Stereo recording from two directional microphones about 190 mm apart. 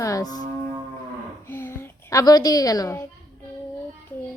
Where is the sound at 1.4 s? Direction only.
10° left (ahead or behind).